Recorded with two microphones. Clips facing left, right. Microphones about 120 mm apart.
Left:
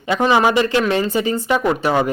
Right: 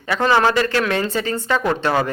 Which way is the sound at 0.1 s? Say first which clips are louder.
Left 2 dB; 15° left (ahead or behind).